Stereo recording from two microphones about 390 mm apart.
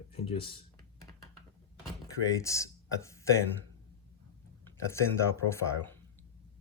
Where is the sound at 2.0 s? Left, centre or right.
Centre.